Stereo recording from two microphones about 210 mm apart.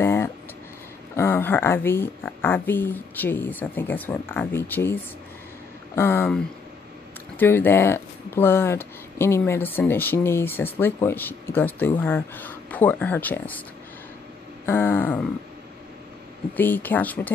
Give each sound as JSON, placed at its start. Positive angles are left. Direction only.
{"t": 0.0, "sound": "a sound", "side_deg": 10}
{"t": 1.1, "sound": "speech", "side_deg": 10}
{"t": 5.9, "sound": "speech", "side_deg": 10}
{"t": 14.7, "sound": "speech", "side_deg": 10}
{"t": 16.5, "sound": "speech", "side_deg": 10}